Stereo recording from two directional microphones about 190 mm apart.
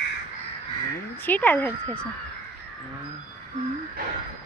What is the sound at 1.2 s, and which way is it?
Speech, 10° left (ahead or behind).